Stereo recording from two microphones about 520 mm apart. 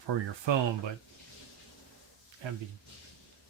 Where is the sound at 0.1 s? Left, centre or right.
Right.